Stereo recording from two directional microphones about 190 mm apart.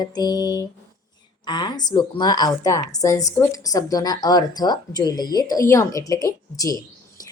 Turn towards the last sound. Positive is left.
turn(degrees=20)  # may be behind; listen again after turning